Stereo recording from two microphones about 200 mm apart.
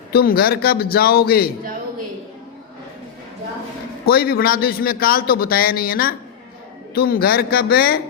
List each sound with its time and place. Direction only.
0.1 s a man's voice: 50° left (ahead or behind)
4.0 s a man's voice: 50° left (ahead or behind)